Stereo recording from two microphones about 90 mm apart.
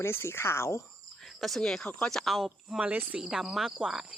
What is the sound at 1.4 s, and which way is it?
Speech, centre (ahead or behind).